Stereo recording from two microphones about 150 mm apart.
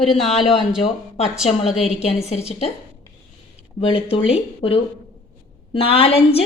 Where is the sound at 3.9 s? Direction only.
40° left (ahead or behind).